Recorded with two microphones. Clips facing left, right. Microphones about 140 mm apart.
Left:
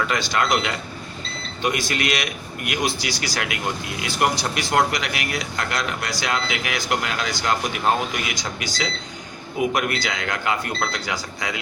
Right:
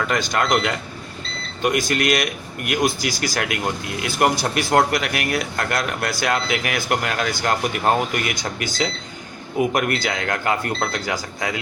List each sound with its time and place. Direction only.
0.1 s speech: 45° right (ahead or behind)